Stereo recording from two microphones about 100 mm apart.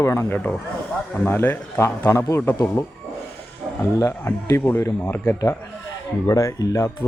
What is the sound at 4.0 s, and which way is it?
Speech, 25° left (ahead or behind).